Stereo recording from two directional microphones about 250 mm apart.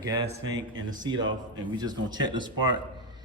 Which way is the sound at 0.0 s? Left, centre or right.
Centre.